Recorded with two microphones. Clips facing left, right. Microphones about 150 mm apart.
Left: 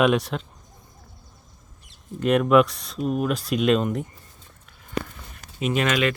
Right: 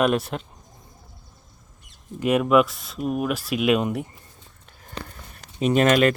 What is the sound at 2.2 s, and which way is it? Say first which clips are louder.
Speech: left 1 dB; 5° right (ahead or behind).